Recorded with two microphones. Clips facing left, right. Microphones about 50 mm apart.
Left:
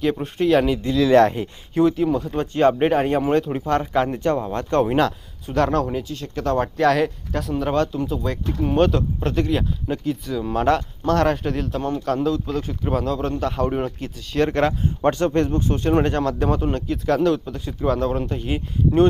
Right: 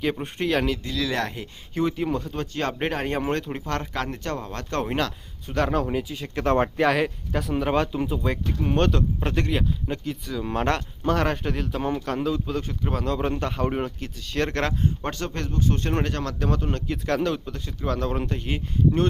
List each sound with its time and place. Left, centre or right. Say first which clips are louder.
0.0 s speech: left 5 dB; centre
0.8 s speech: left 12 dB; left
1.7 s speech: left 6 dB; centre
2.2 s speech: left 10 dB; centre
2.7 s speech: left 8 dB; centre
3.7 s speech: left 8 dB; centre
4.9 s speech: left 7 dB; centre
8.7 s speech: left 4 dB; centre
13.1 s speech: left 3 dB; centre
15.1 s speech: left 10 dB; left
15.7 s speech: left 7 dB; centre
16.8 s speech: left 6 dB; centre